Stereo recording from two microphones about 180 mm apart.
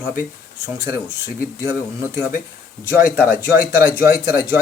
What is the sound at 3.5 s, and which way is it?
Speech, 55° left (ahead or behind).